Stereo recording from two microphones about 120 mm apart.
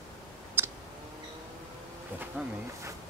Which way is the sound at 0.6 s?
20° right (ahead or behind).